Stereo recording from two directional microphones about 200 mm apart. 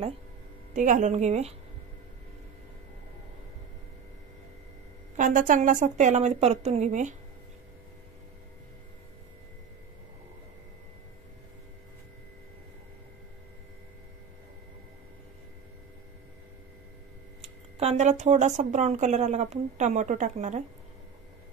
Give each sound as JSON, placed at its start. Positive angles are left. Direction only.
{"t": 0.7, "sound": "speech", "side_deg": -40}
{"t": 5.1, "sound": "speech", "side_deg": -40}
{"t": 17.7, "sound": "speech", "side_deg": -35}